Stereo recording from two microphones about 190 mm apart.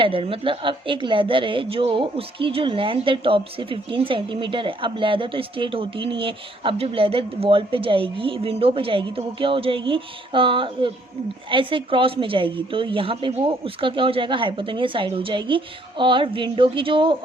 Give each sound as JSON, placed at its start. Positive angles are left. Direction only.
{"t": 0.0, "sound": "a woman's voice", "side_deg": -30}